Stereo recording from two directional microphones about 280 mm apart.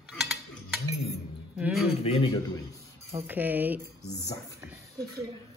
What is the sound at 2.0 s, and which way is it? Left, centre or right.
Speech, left.